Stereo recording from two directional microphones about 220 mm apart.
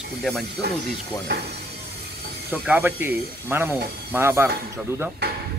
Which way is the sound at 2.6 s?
10° right (ahead or behind).